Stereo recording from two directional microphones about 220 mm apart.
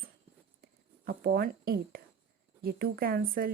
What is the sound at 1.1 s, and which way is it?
Speech, 45° right (ahead or behind).